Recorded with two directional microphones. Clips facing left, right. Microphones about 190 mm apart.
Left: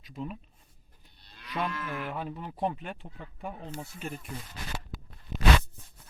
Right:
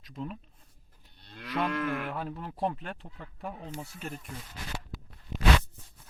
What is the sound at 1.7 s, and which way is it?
Speech, 60° right (ahead or behind).